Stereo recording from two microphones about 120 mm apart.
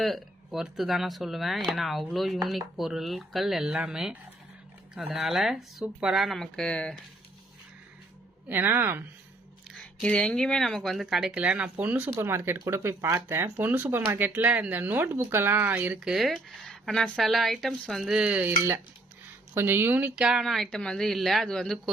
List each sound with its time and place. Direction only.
0.0 s speech: centre (ahead or behind)
8.4 s speech: 15° right (ahead or behind)
9.7 s speech: 5° left (ahead or behind)